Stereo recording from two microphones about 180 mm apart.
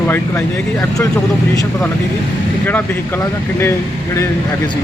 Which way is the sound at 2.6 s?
10° left (ahead or behind).